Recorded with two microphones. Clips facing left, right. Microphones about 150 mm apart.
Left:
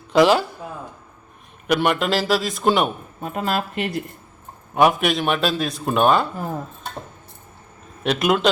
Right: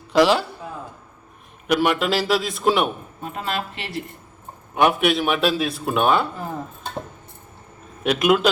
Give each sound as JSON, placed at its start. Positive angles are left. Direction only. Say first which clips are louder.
{"t": 0.1, "sound": "a man's voice", "louder": "left 1 dB", "side_deg": 0}
{"t": 1.6, "sound": "a man's voice", "louder": "even", "side_deg": 0}
{"t": 3.2, "sound": "speech", "louder": "left 5 dB", "side_deg": 50}
{"t": 4.7, "sound": "a man's voice", "louder": "left 1 dB", "side_deg": 0}
{"t": 8.0, "sound": "a man's voice", "louder": "right 1 dB", "side_deg": -5}